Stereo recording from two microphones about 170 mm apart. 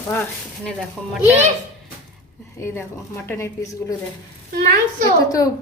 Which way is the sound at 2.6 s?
15° left (ahead or behind).